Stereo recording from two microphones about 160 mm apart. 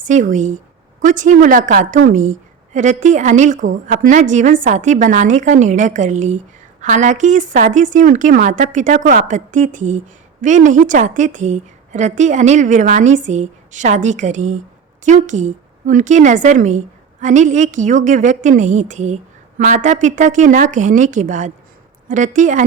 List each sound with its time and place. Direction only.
0.0 s a woman's voice: 55° right (ahead or behind)